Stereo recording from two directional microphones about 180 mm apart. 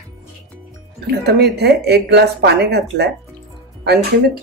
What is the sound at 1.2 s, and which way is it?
Speech, 65° right (ahead or behind).